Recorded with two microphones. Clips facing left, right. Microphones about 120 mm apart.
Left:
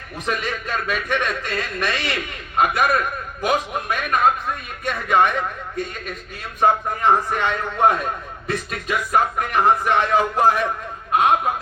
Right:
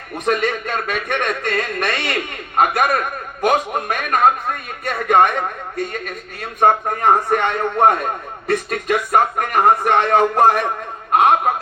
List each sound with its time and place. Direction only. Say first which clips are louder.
0.3 s speech: right 6 dB; 50° right (ahead or behind)